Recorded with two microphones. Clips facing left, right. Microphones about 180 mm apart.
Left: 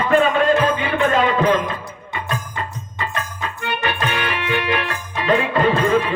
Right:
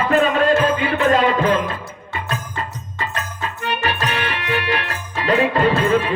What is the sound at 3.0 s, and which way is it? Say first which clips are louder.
Music: even; 40° right (ahead or behind).